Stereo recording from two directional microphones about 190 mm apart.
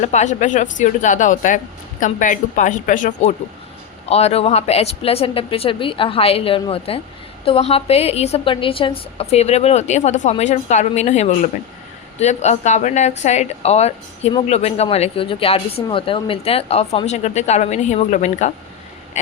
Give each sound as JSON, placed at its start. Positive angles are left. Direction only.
{"t": 0.0, "sound": "a woman's voice", "side_deg": 40}